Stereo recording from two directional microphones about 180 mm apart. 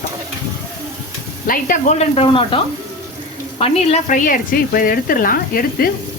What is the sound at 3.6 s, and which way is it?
Speech, 35° left (ahead or behind).